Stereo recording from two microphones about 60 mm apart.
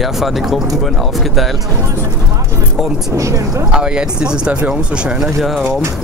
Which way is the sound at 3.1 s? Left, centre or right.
Right.